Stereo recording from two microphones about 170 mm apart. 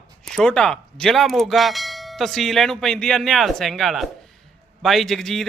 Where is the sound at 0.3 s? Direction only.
5° left (ahead or behind).